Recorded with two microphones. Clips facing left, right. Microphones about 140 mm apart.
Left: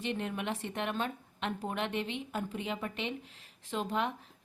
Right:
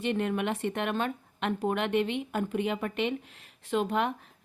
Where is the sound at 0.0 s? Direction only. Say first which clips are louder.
Right 7 dB; 65° right (ahead or behind).